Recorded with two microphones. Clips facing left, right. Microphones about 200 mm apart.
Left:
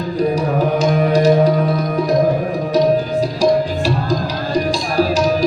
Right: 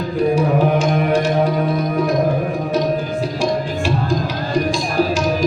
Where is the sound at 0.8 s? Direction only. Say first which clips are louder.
Left 2 dB; 40° left (ahead or behind).